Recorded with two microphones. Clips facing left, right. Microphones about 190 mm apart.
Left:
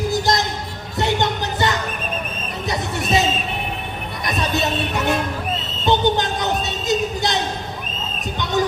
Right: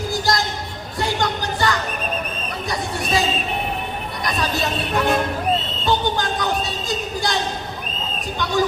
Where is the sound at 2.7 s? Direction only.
20° left (ahead or behind).